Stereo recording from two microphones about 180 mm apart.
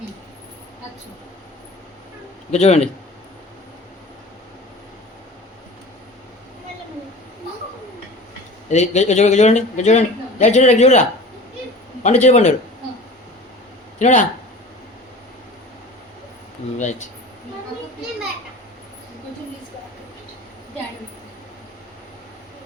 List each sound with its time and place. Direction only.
2.5 s a man's voice: 40° left (ahead or behind)
8.7 s a man's voice: 40° left (ahead or behind)
12.0 s a man's voice: 40° left (ahead or behind)
14.0 s speech: 45° left (ahead or behind)
16.7 s speech: 40° left (ahead or behind)